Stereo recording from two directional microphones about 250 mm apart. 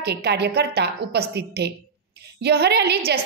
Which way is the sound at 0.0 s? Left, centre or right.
Right.